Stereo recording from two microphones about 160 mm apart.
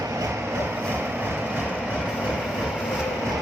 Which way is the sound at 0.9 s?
10° right (ahead or behind).